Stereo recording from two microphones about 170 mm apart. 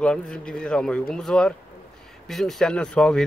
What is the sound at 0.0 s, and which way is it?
Speech, 5° left (ahead or behind).